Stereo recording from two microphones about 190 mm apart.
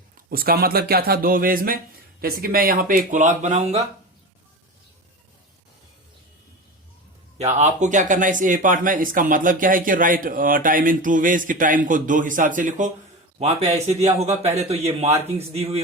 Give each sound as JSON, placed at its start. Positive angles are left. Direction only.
{"t": 0.3, "sound": "speech", "side_deg": -50}
{"t": 7.3, "sound": "speech", "side_deg": -35}